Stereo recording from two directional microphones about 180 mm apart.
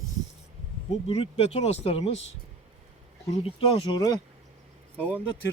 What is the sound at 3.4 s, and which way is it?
Speech, 30° left (ahead or behind).